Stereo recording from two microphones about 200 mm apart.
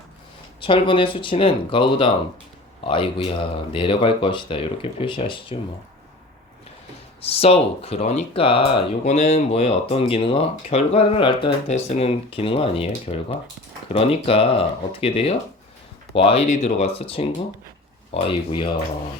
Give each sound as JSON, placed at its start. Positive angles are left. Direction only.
{"t": 0.6, "sound": "speech", "side_deg": 25}
{"t": 7.2, "sound": "speech", "side_deg": 30}